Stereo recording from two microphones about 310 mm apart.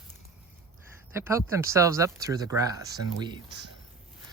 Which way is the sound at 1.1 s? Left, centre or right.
Centre.